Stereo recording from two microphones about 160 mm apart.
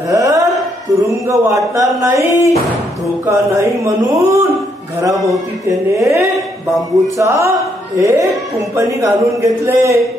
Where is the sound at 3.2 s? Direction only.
20° right (ahead or behind).